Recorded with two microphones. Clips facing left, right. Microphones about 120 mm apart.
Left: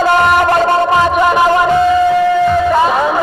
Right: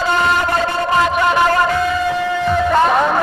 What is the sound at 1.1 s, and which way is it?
Music, 10° left (ahead or behind).